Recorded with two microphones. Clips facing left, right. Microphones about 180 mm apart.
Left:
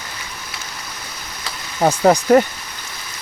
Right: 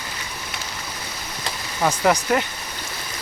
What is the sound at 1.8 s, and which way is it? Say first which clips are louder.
Speech: left 5 dB; 35° left (ahead or behind).